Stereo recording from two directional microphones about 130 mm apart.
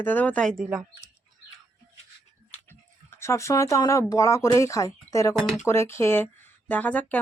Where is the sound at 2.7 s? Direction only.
20° left (ahead or behind).